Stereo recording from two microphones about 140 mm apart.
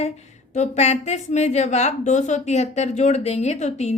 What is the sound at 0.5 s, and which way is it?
A woman's voice, 60° left (ahead or behind).